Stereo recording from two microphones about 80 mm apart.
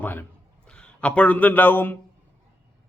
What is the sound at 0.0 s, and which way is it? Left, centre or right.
Speech, left.